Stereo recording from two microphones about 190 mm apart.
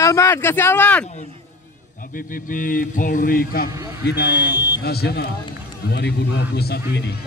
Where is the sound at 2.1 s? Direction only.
45° left (ahead or behind).